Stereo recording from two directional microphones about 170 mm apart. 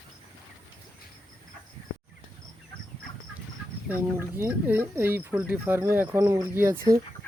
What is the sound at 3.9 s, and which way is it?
Speech, 15° right (ahead or behind).